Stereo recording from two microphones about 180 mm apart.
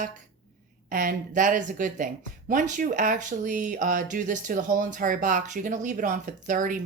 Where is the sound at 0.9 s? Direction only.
50° right (ahead or behind).